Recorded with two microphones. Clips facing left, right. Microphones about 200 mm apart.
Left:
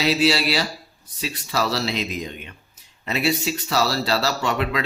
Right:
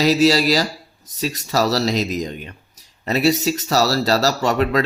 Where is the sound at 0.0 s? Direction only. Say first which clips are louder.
Right 5 dB; 40° right (ahead or behind).